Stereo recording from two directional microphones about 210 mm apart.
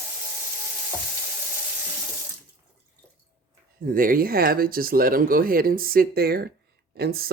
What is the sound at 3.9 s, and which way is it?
Speech, 40° right (ahead or behind).